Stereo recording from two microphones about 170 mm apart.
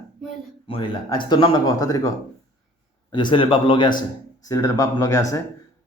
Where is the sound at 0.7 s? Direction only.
30° left (ahead or behind).